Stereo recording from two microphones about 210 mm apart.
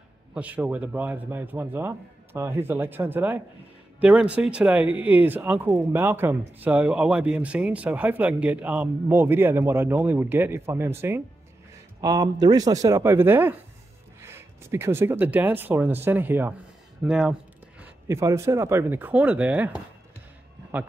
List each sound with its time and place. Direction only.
0.3 s speech: 5° right (ahead or behind)